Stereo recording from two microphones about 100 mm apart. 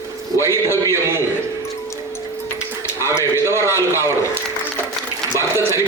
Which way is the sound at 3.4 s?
25° right (ahead or behind).